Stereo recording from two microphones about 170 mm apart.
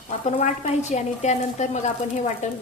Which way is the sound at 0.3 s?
40° left (ahead or behind).